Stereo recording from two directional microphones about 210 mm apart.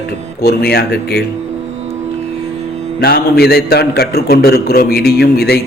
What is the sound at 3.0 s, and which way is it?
A man's voice, 50° left (ahead or behind).